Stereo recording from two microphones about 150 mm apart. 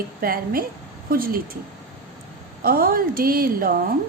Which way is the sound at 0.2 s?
80° right.